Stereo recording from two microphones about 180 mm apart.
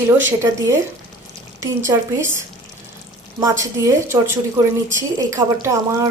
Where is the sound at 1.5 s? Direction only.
15° right (ahead or behind).